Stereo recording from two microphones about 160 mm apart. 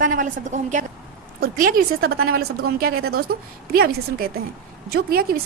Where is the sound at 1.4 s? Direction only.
65° right (ahead or behind).